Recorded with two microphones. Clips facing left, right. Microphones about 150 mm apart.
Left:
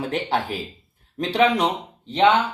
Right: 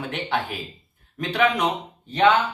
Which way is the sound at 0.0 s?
35° left (ahead or behind).